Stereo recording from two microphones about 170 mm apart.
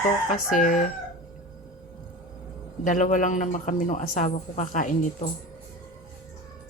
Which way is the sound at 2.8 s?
50° left (ahead or behind).